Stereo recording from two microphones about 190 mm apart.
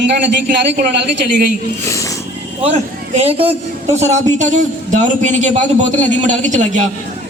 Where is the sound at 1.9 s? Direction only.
15° left (ahead or behind).